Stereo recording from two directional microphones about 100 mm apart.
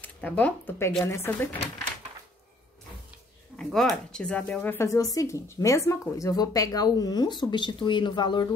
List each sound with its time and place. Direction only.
0.0 s speech: 15° left (ahead or behind)
3.5 s speech: 5° left (ahead or behind)
4.7 s speech: 35° left (ahead or behind)